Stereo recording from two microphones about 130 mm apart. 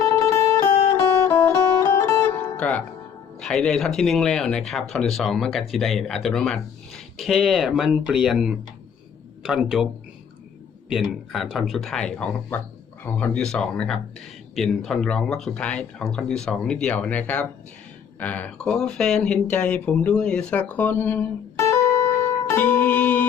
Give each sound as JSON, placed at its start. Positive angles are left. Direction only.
{"t": 0.0, "sound": "music", "side_deg": 25}
{"t": 3.4, "sound": "speech", "side_deg": 5}